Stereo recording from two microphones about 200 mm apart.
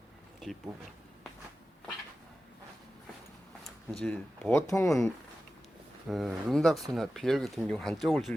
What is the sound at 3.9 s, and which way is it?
Speech, 5° left (ahead or behind).